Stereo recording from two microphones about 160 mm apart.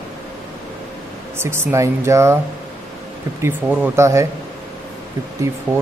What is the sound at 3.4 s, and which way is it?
Speech, 10° right (ahead or behind).